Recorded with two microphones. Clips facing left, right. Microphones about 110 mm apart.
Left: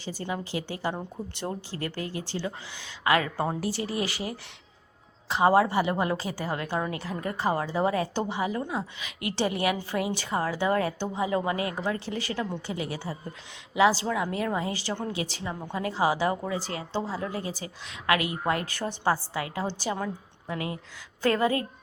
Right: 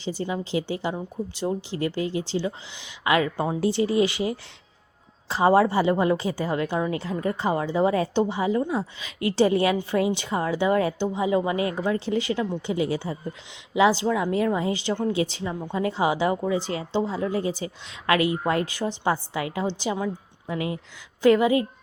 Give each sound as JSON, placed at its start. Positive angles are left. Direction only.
{"t": 0.0, "sound": "a woman's voice", "side_deg": -20}
{"t": 6.7, "sound": "a woman's voice", "side_deg": -10}
{"t": 6.9, "sound": "a woman's voice", "side_deg": -25}
{"t": 21.2, "sound": "a woman's voice", "side_deg": -15}